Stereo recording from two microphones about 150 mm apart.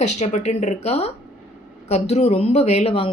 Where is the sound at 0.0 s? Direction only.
50° left (ahead or behind).